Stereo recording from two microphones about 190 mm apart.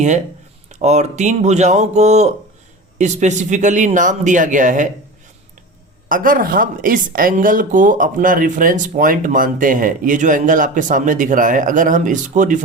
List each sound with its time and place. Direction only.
0.7 s speech: 35° right (ahead or behind)
6.1 s speech: 45° right (ahead or behind)